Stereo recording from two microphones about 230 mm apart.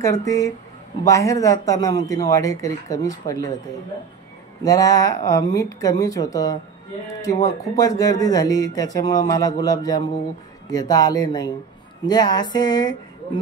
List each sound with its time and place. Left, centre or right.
0.0 s speech: centre
4.6 s speech: centre